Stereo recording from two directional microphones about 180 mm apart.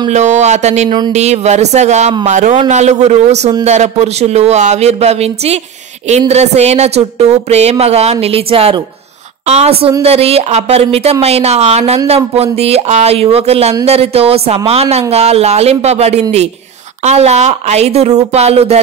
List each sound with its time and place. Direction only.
0.1 s speech: 40° right (ahead or behind)
0.8 s speech: 25° right (ahead or behind)
1.1 s a man's voice: 40° right (ahead or behind)